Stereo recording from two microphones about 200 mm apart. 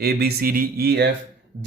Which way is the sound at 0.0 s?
50° right (ahead or behind).